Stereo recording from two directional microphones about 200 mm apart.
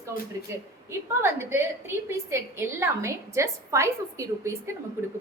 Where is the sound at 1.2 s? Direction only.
15° right (ahead or behind).